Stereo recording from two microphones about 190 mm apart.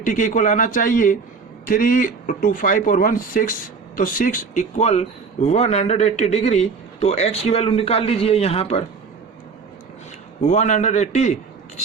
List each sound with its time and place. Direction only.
0.0 s a man's voice: 45° left (ahead or behind)
10.4 s a man's voice: 40° left (ahead or behind)